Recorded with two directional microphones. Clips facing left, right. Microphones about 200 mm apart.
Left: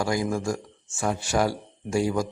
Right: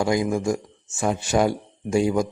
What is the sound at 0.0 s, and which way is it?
Speech, 20° right (ahead or behind).